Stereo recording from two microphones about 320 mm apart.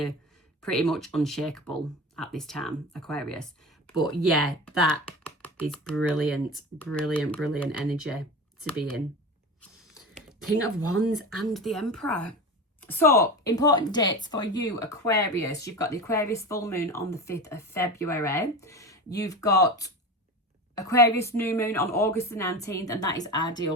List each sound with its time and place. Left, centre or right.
0.6 s speech: centre
3.8 s speech: centre
5.9 s speech: right
6.1 s speech: centre
10.6 s speech: right
11.1 s speech: centre